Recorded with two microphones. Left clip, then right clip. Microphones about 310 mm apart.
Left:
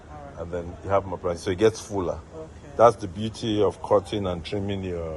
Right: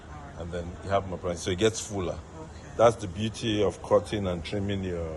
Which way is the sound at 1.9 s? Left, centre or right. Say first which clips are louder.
Left 5 dB; left.